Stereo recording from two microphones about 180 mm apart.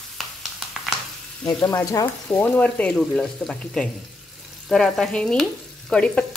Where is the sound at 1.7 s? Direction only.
20° left (ahead or behind).